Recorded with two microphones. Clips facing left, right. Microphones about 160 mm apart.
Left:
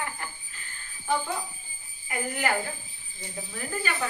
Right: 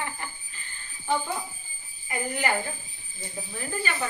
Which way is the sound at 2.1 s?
Centre (ahead or behind).